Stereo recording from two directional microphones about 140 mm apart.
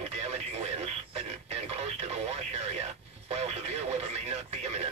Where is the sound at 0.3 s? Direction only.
50° right (ahead or behind).